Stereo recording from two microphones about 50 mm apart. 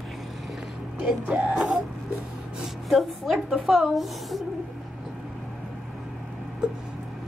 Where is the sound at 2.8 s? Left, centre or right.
Centre.